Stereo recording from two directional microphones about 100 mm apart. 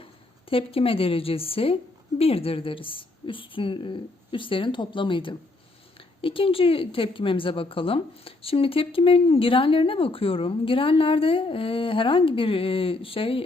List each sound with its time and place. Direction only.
0.5 s a woman's voice: 70° left (ahead or behind)